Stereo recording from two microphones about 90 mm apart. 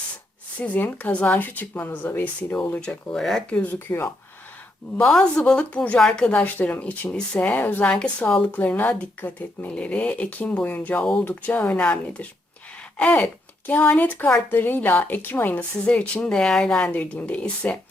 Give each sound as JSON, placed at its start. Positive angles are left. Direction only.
{"t": 0.6, "sound": "a woman's voice", "side_deg": 20}
{"t": 4.9, "sound": "a woman's voice", "side_deg": 5}